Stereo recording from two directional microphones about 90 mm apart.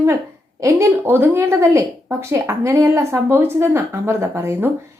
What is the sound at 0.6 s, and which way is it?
A woman's voice, 30° right (ahead or behind).